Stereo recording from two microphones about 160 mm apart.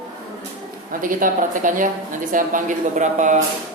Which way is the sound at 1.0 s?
60° right (ahead or behind).